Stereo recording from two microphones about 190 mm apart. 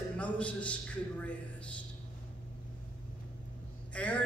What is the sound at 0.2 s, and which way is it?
Speech, 5° left (ahead or behind).